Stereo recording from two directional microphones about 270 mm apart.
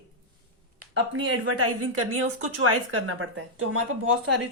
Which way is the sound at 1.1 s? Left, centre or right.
Right.